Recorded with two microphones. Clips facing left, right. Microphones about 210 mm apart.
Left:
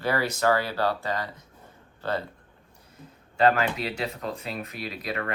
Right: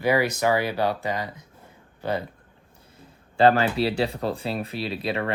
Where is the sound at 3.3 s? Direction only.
30° right (ahead or behind).